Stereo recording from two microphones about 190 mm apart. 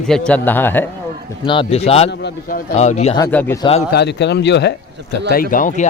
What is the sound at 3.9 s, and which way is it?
Speech, 60° left (ahead or behind).